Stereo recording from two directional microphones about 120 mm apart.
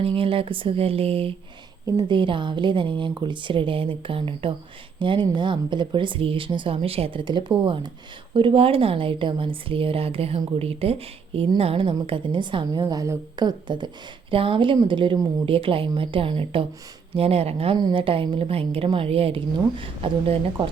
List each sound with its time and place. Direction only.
0.2 s speech: 50° right (ahead or behind)
2.0 s speech: 45° right (ahead or behind)
17.7 s speech: 40° right (ahead or behind)